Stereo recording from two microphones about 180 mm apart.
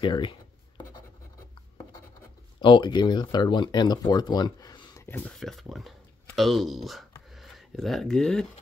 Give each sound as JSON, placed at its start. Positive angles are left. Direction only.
{"t": 0.0, "sound": "writing", "side_deg": 25}
{"t": 2.6, "sound": "speech", "side_deg": 25}